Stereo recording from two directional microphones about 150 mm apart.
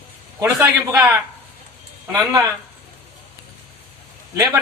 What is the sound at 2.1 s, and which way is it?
Speech, 20° right (ahead or behind).